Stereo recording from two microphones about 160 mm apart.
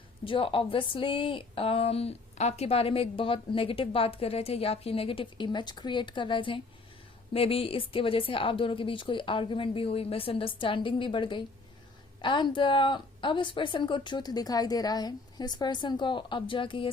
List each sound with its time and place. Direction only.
0.3 s a woman's voice: 35° left (ahead or behind)